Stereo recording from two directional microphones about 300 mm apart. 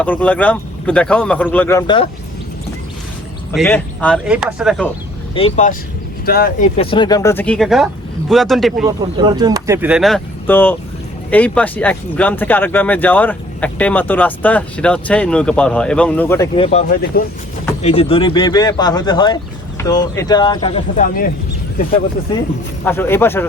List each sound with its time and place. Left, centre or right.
0.0 s speech: centre
3.5 s speech: centre
5.3 s speech: left; by 8.7 s centre
8.8 s speech: centre
16.6 s speech: left
22.8 s speech: centre